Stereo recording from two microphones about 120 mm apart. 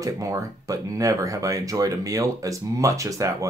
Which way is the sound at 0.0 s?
30° right (ahead or behind).